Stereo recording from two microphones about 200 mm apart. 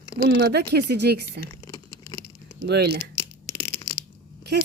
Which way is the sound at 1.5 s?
15° left (ahead or behind).